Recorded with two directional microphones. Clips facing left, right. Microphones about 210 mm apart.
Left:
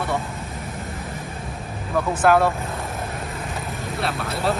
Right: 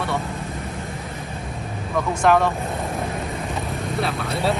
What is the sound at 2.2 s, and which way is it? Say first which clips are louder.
Speech: even; 5° left (ahead or behind).